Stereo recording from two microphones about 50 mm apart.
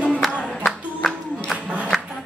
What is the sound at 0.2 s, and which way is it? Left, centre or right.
Music, centre.